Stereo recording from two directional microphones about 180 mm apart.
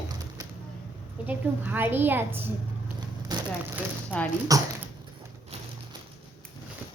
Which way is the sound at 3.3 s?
20° right (ahead or behind).